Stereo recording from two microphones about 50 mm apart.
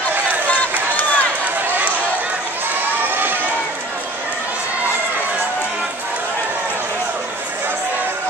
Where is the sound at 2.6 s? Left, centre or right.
Right.